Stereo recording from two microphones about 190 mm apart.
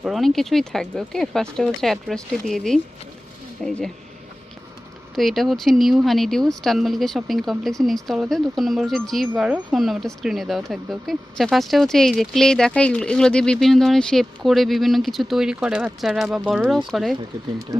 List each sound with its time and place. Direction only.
0.0 s speech: centre (ahead or behind)
5.1 s speech: centre (ahead or behind)